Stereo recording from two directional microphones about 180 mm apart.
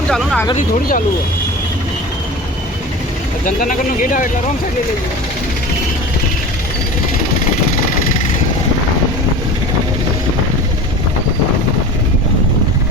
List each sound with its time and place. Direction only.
0.1 s speech: 5° left (ahead or behind)
0.5 s speech: 50° left (ahead or behind)
3.4 s speech: 50° left (ahead or behind)